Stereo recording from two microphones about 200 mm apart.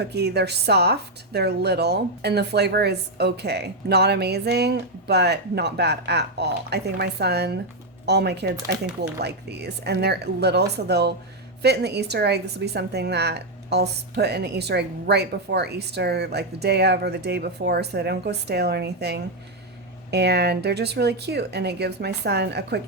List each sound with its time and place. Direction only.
0.0 s a woman's voice: 55° right (ahead or behind)